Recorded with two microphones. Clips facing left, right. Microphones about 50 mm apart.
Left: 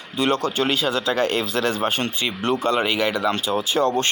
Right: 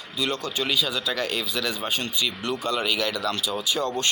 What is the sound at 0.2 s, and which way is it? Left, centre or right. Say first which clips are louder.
Speech: left 7 dB; left.